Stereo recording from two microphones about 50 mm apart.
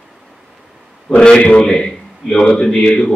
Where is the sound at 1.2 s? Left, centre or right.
Centre.